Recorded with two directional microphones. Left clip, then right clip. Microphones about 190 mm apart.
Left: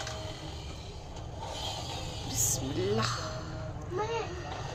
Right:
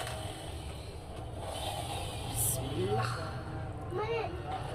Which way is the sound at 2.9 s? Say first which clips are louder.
Left 2 dB; 50° left (ahead or behind).